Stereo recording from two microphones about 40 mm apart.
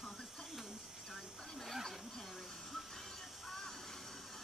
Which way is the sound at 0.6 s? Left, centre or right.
Centre.